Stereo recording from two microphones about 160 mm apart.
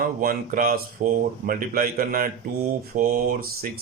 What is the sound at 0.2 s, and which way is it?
A man's voice, 60° right (ahead or behind).